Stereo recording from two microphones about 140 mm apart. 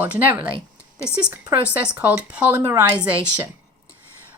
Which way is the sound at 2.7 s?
30° right (ahead or behind).